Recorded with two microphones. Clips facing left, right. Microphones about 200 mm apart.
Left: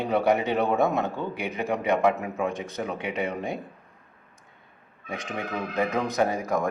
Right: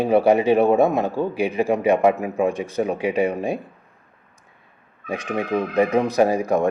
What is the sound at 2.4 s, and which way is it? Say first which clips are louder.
Speech: right 8 dB; 30° right (ahead or behind).